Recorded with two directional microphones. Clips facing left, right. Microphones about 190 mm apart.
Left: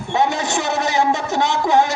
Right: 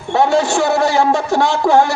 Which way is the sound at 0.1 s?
20° left (ahead or behind).